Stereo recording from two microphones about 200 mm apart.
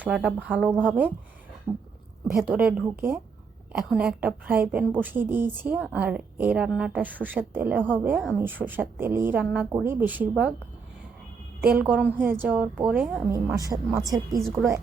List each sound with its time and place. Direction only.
0.0 s a woman's voice: 5° right (ahead or behind)
2.4 s a woman's voice: 5° right (ahead or behind)
11.6 s a woman's voice: 5° right (ahead or behind)
13.3 s a woman's voice: 15° right (ahead or behind)